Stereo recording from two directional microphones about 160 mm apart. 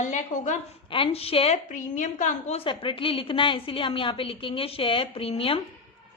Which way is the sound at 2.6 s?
35° left (ahead or behind).